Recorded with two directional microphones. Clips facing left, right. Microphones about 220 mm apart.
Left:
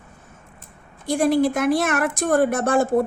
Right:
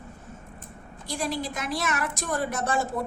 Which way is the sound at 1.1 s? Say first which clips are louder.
Left 12 dB; 55° left (ahead or behind).